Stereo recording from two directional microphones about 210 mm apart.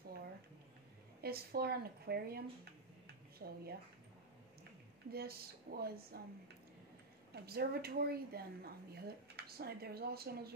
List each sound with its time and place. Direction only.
1.2 s a woman's voice: 45° right (ahead or behind)
5.1 s a woman's voice: 45° right (ahead or behind)
7.3 s a woman's voice: 50° right (ahead or behind)